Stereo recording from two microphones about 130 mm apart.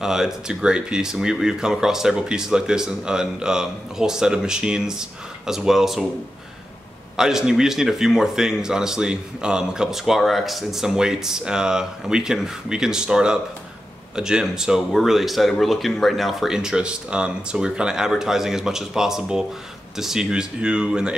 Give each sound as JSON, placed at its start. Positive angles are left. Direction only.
{"t": 0.0, "sound": "speech", "side_deg": -5}
{"t": 7.2, "sound": "speech", "side_deg": -5}